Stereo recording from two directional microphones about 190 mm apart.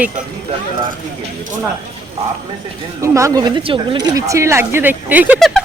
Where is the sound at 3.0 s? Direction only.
15° right (ahead or behind).